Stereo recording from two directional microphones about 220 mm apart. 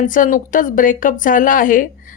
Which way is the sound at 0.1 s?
35° left (ahead or behind).